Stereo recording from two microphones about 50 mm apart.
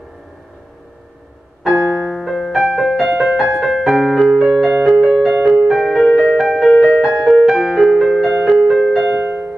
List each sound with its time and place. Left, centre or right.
1.6 s music: centre
3.6 s piano: centre
4.9 s music: centre